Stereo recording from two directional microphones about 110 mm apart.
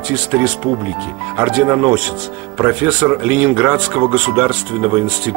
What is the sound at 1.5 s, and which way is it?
Speech, 20° right (ahead or behind).